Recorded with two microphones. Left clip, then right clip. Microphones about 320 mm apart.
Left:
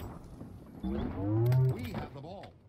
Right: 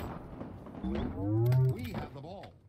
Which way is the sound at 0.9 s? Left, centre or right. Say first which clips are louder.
Even; centre.